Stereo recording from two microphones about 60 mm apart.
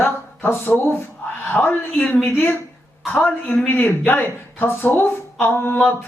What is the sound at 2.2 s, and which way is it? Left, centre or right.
Speech, left.